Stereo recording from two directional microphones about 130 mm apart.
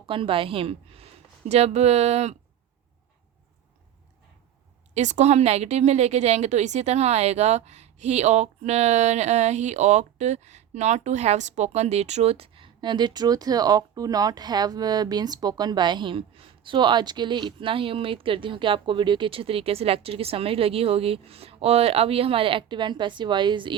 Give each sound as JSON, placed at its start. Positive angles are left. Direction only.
{"t": 0.1, "sound": "a woman's voice", "side_deg": -45}
{"t": 4.9, "sound": "a woman's voice", "side_deg": -65}